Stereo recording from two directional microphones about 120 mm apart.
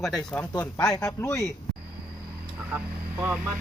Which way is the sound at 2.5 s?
10° right (ahead or behind).